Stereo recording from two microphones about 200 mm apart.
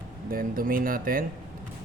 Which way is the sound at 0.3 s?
45° right (ahead or behind).